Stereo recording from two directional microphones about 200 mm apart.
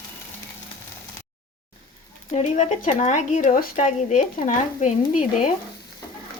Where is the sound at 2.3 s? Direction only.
35° left (ahead or behind).